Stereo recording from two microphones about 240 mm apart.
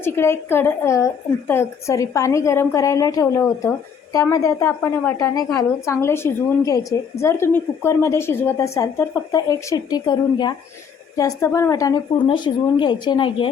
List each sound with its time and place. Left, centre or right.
0.0 s a woman's voice: centre